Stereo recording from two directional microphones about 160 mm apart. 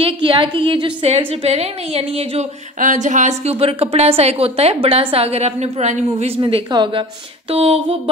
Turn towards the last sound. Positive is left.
turn(degrees=-35)  # may be behind; listen again after turning